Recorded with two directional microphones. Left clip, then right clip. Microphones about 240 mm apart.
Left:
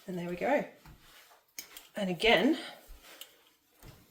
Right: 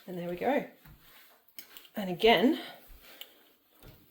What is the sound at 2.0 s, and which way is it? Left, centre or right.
Speech, right.